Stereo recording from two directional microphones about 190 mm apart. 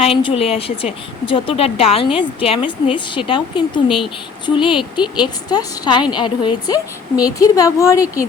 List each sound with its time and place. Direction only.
0.0 s a woman's voice: 30° left (ahead or behind)
3.8 s speech: centre (ahead or behind)
4.4 s a woman's voice: 25° left (ahead or behind)